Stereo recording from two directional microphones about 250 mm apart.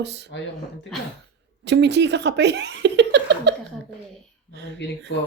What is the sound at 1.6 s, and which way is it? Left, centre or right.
Speech, right.